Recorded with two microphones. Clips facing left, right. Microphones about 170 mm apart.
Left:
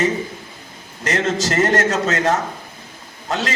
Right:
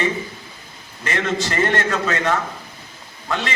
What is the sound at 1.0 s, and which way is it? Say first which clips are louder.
A man's voice: left 3 dB; 40° left (ahead or behind).